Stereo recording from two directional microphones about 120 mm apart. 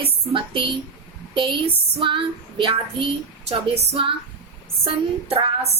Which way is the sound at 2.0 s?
45° right (ahead or behind).